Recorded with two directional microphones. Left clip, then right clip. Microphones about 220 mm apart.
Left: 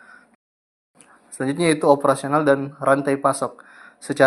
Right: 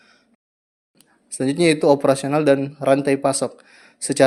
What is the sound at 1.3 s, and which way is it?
A man's voice, 50° right (ahead or behind).